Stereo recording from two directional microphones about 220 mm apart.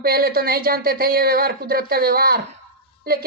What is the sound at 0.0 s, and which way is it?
A woman's voice, 40° right (ahead or behind).